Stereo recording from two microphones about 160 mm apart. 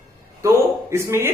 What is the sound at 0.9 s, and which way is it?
Speech, 15° right (ahead or behind).